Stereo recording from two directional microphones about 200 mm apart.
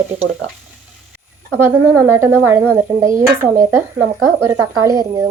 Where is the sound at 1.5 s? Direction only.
10° right (ahead or behind).